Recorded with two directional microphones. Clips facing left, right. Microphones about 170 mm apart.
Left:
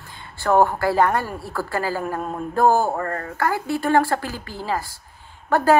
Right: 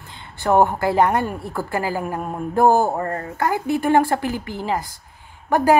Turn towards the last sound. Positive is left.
turn(degrees=-15)  # may be behind; listen again after turning